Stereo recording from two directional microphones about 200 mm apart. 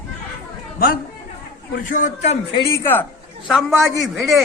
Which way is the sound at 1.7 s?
40° left (ahead or behind).